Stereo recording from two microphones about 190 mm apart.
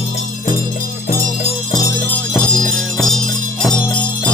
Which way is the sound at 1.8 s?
10° left (ahead or behind).